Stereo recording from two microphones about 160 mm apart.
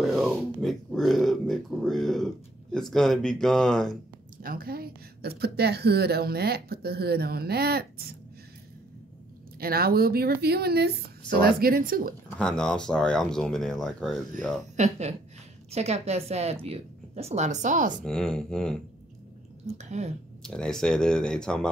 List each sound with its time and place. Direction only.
0.0 s speech: centre (ahead or behind)
4.4 s speech: 65° right (ahead or behind)
9.6 s speech: 70° right (ahead or behind)
12.4 s speech: 5° left (ahead or behind)
14.8 s a woman's voice: 45° right (ahead or behind)
18.0 s speech: 5° left (ahead or behind)
19.6 s speech: 45° right (ahead or behind)
20.4 s speech: 5° left (ahead or behind)